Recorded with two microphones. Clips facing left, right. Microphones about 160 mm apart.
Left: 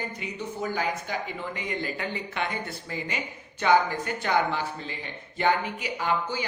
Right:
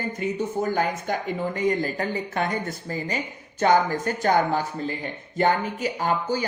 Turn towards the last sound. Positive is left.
turn(degrees=-45)  # may be behind; listen again after turning